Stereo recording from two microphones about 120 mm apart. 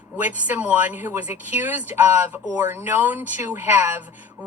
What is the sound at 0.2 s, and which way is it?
Speech, 15° right (ahead or behind).